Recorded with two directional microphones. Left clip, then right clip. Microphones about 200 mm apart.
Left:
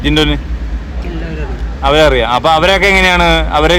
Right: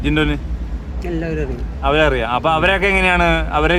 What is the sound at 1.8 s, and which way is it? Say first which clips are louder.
Speech: left 7 dB; 15° left (ahead or behind).